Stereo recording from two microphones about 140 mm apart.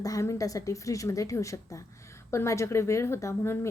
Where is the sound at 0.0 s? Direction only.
25° left (ahead or behind).